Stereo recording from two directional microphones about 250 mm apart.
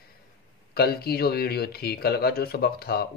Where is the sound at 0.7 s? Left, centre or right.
Left.